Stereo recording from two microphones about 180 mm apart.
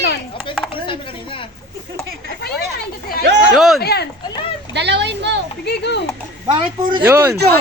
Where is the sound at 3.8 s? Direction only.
65° left (ahead or behind).